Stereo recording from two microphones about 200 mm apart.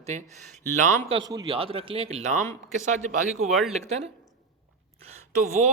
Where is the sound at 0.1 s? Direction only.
35° right (ahead or behind).